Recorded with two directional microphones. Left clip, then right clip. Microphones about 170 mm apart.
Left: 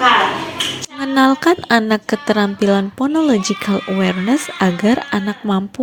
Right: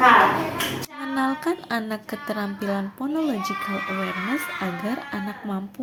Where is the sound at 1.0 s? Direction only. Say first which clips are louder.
Left 12 dB; 50° left (ahead or behind).